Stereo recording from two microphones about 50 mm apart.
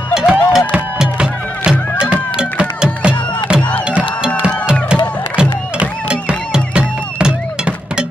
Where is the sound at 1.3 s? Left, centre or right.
Left.